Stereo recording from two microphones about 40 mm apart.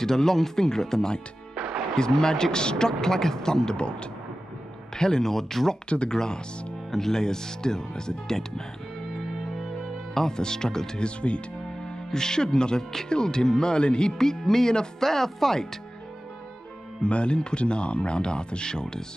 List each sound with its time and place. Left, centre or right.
0.0 s speech: centre
1.5 s music: centre
2.0 s speech: centre
5.9 s speech: left
10.1 s speech: centre
11.1 s speech: left
12.1 s speech: centre
17.0 s speech: left